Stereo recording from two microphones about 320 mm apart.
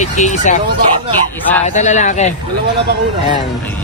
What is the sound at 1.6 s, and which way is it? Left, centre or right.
Speech, left.